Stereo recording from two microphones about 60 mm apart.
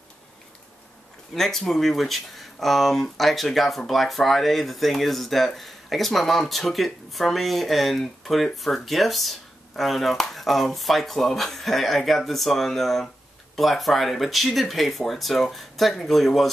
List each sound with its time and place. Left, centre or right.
1.3 s speech: centre